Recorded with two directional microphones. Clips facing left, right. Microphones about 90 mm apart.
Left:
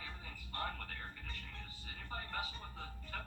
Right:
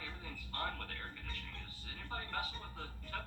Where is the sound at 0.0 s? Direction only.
20° left (ahead or behind).